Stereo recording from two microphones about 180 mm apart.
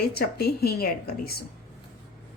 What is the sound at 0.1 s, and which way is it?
Speech, 60° left (ahead or behind).